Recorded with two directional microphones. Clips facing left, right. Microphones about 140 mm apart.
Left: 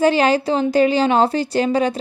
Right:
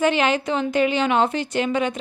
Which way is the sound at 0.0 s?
35° left (ahead or behind).